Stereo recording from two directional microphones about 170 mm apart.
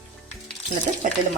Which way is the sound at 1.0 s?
55° right (ahead or behind).